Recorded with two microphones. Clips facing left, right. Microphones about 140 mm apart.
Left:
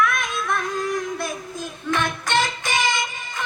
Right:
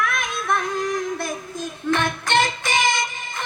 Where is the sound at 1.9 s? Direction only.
50° right (ahead or behind).